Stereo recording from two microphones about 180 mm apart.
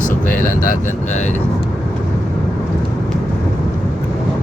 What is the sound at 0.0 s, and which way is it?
Speech, 50° left (ahead or behind).